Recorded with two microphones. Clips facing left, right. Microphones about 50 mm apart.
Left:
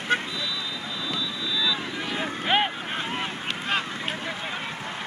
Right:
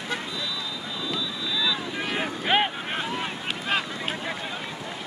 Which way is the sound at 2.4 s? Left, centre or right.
Centre.